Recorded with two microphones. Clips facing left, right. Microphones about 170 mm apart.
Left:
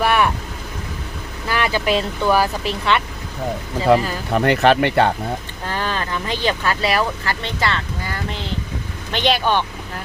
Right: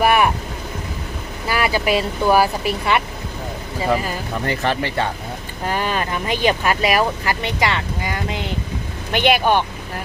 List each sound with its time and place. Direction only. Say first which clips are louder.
0.0 s vehicle: right 2 dB; 10° right (ahead or behind)
1.5 s speech: right 1 dB; 10° right (ahead or behind)
4.4 s speech: left 8 dB; 70° left (ahead or behind)
5.6 s speech: right 3 dB; 15° right (ahead or behind)